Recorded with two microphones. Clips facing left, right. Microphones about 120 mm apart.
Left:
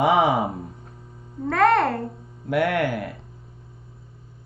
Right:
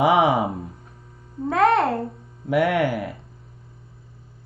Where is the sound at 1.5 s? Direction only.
25° right (ahead or behind).